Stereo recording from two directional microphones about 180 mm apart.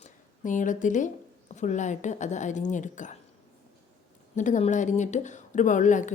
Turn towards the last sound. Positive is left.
turn(degrees=45)  # may be behind; listen again after turning